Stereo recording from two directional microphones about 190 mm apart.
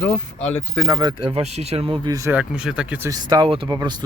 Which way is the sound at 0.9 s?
25° right (ahead or behind).